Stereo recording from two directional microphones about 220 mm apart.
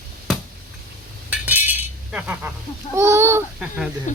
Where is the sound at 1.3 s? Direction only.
10° right (ahead or behind).